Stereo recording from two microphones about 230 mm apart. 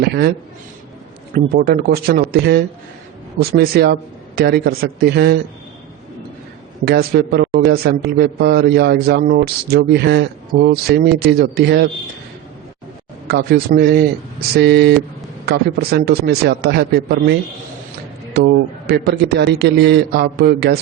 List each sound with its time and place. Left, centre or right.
0.0 s a man's voice: right
1.5 s a man's voice: right
6.8 s a man's voice: right
13.2 s a man's voice: right
18.3 s a man's voice: right